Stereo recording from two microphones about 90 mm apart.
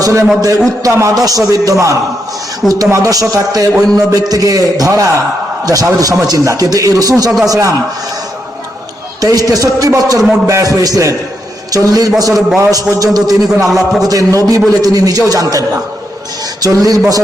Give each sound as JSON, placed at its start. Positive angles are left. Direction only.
{"t": 0.0, "sound": "a man's voice", "side_deg": -35}
{"t": 9.2, "sound": "a man's voice", "side_deg": -40}
{"t": 13.5, "sound": "a man's voice", "side_deg": -5}
{"t": 14.1, "sound": "a man's voice", "side_deg": -40}